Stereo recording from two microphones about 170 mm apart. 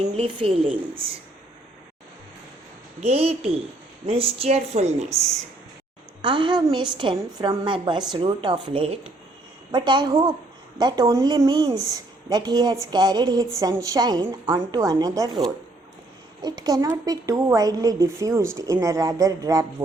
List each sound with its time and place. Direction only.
0.0 s a woman's voice: 35° right (ahead or behind)
3.0 s a woman's voice: 35° right (ahead or behind)
6.2 s a woman's voice: 30° right (ahead or behind)